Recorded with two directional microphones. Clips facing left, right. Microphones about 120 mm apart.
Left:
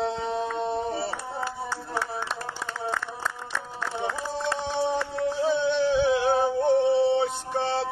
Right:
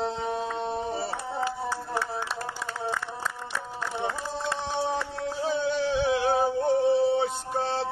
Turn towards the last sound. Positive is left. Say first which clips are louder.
# left 1 dB
turn(degrees=0)  # may be behind; listen again after turning